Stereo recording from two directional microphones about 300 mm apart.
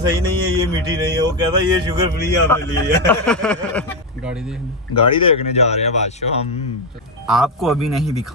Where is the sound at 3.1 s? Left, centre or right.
Centre.